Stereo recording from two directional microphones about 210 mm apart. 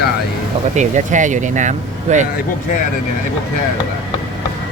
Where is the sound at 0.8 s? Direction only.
35° right (ahead or behind).